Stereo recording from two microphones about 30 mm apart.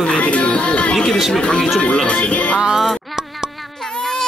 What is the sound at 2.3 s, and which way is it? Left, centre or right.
Speech, left.